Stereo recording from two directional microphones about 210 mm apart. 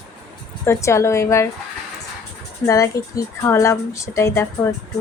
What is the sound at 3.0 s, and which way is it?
A woman's voice, 15° left (ahead or behind).